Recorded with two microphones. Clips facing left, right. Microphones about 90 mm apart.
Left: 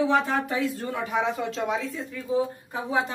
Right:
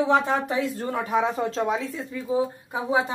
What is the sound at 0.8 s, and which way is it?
Speech, 35° right (ahead or behind).